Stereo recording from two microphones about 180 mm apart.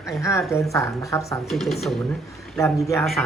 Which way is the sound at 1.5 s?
Centre (ahead or behind).